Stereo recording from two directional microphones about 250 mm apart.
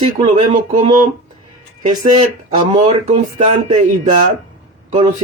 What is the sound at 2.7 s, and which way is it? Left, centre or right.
Speech, right.